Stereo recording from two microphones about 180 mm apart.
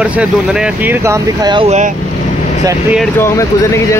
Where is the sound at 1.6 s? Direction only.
40° right (ahead or behind).